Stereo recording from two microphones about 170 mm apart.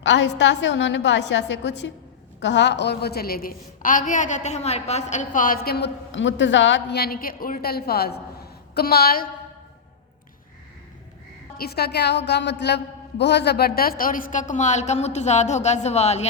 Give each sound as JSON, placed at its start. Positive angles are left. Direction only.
{"t": 0.0, "sound": "a woman's voice", "side_deg": 90}
{"t": 11.5, "sound": "a woman's voice", "side_deg": 65}